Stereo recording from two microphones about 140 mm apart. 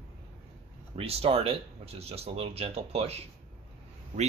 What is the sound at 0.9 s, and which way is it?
Speech, 45° right (ahead or behind).